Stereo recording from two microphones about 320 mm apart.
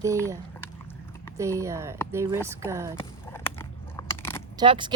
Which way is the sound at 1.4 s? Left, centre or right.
Centre.